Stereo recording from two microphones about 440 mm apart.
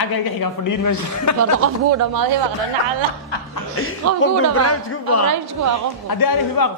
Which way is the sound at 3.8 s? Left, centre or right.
Left.